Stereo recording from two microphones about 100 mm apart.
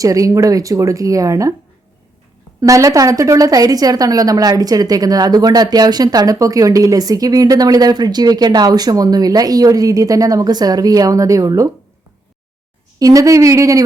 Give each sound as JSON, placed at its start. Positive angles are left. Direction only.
{"t": 0.0, "sound": "a woman's voice", "side_deg": -35}
{"t": 2.6, "sound": "a woman's voice", "side_deg": -35}
{"t": 13.0, "sound": "a woman's voice", "side_deg": -35}